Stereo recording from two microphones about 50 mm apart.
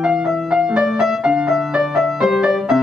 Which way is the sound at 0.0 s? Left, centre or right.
Centre.